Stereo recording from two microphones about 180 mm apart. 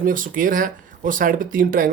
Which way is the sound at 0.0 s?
50° right (ahead or behind).